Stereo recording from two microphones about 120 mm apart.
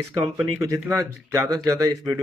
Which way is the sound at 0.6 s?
25° right (ahead or behind).